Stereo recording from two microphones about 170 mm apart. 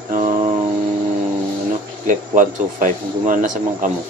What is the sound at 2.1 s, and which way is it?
Speech, 50° right (ahead or behind).